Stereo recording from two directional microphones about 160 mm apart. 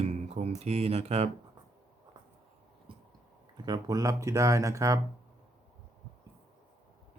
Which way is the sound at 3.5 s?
25° right (ahead or behind).